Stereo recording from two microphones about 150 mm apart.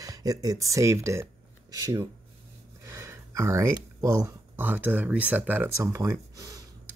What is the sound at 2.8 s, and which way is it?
Speech, 20° right (ahead or behind).